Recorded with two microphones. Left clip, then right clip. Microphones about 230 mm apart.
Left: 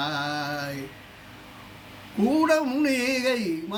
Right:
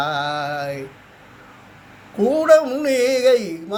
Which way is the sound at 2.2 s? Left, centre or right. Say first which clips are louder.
Right 9 dB; centre.